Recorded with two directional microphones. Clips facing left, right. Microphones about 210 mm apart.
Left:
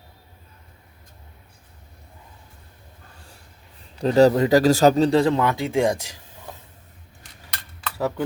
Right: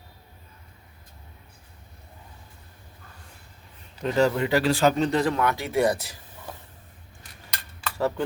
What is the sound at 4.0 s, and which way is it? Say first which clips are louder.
Speech: left 7 dB; 35° left (ahead or behind).